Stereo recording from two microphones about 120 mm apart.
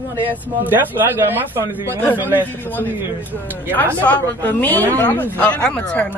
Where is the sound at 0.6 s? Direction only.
15° right (ahead or behind).